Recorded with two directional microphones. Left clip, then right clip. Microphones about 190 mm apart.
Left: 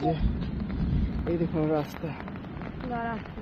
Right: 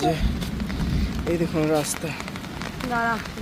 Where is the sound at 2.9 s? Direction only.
80° right.